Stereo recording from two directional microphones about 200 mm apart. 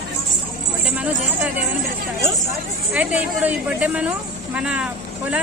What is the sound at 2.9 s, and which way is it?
A woman's voice, 5° right (ahead or behind).